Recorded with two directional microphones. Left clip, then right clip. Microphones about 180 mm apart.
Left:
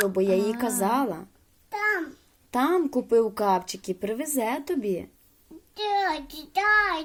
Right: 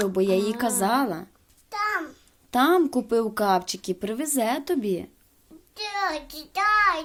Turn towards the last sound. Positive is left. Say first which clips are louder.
# right 1 dB
turn(degrees=-15)  # may be behind; listen again after turning